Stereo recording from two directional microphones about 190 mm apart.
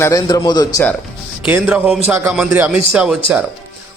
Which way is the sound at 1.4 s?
5° right (ahead or behind).